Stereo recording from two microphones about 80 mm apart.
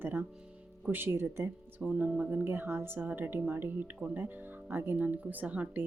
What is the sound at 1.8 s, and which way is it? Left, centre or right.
Speech, centre.